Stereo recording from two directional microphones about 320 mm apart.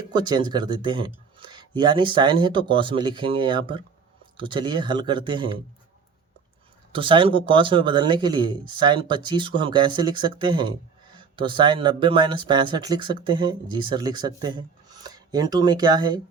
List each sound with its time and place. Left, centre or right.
0.1 s speech: centre
6.9 s speech: centre